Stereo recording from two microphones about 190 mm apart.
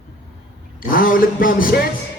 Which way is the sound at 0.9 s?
50° left (ahead or behind).